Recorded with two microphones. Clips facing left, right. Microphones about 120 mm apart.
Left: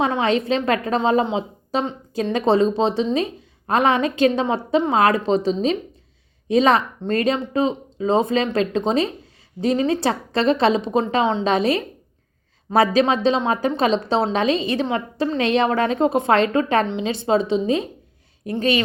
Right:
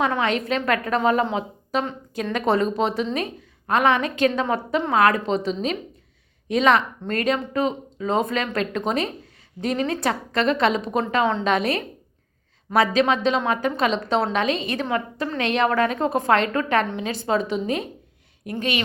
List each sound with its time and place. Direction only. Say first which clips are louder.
0.0 s a woman's voice: left 3 dB; 25° left (ahead or behind)
11.4 s a woman's voice: left 3 dB; 30° left (ahead or behind)